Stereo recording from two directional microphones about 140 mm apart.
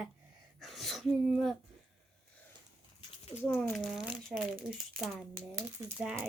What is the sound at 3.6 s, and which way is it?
Speech, 5° left (ahead or behind).